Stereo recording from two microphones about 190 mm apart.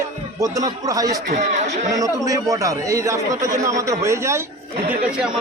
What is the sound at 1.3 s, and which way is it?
Speech, 35° right (ahead or behind).